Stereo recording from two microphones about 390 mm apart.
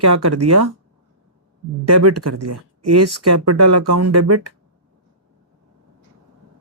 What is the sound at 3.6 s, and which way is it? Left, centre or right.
Speech, right.